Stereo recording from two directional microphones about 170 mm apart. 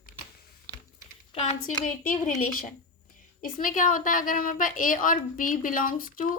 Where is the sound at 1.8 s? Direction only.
50° left (ahead or behind).